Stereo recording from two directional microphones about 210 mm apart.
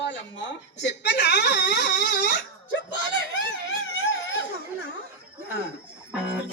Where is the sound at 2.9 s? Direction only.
60° left (ahead or behind).